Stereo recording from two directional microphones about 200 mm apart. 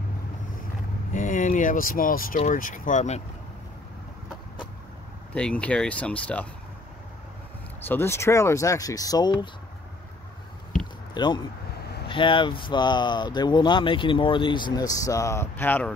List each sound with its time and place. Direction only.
1.1 s speech: 40° left (ahead or behind)
5.3 s speech: 5° left (ahead or behind)
7.8 s speech: 10° left (ahead or behind)
11.1 s speech: 20° left (ahead or behind)